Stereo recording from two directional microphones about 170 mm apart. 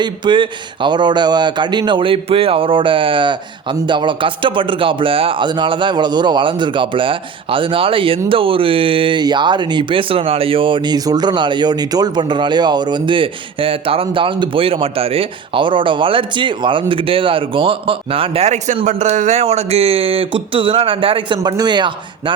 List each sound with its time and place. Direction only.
0.0 s speech: 30° right (ahead or behind)